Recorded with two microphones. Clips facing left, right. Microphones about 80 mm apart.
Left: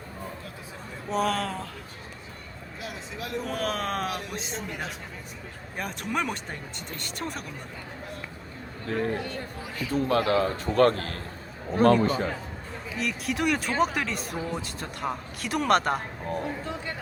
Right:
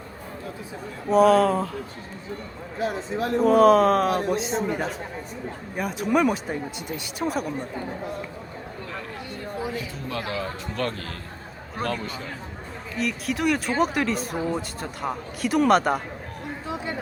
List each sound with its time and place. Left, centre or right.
1.1 s speech: centre
2.7 s speech: right
3.5 s speech: centre
4.1 s speech: right
5.7 s speech: centre
8.9 s a man's voice: left
13.0 s speech: centre